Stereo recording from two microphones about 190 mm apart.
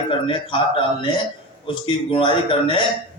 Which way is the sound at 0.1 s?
25° left (ahead or behind).